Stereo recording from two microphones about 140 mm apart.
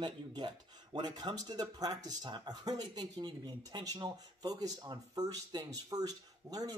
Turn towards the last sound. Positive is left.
turn(degrees=-25)  # may be behind; listen again after turning